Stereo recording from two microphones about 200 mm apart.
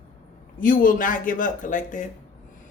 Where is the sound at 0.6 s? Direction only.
45° left (ahead or behind).